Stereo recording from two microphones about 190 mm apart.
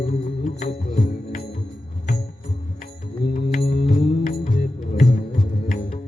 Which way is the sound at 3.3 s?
35° left (ahead or behind).